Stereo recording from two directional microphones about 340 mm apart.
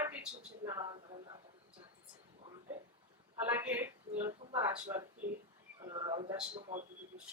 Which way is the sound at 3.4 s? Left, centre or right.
Centre.